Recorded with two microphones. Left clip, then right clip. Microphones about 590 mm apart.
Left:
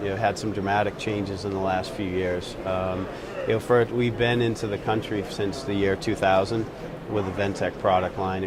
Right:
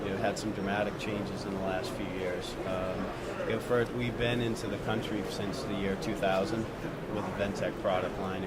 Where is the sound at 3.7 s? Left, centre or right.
Left.